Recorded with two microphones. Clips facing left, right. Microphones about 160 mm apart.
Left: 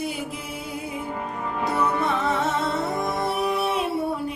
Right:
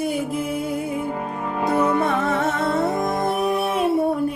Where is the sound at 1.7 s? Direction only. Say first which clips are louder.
Right 5 dB; 50° right (ahead or behind).